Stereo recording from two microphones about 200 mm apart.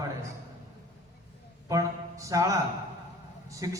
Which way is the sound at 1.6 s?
15° right (ahead or behind).